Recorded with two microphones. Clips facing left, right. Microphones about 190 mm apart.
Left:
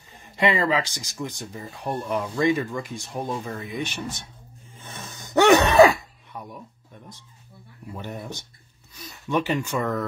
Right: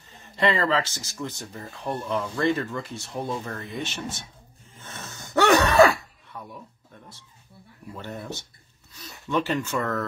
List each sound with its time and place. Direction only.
0.2 s speech: 15° left (ahead or behind)
4.7 s gasp: 15° left (ahead or behind)
7.9 s speech: 15° left (ahead or behind)